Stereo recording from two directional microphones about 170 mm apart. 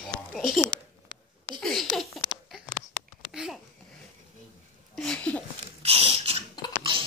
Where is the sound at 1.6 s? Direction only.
Centre (ahead or behind).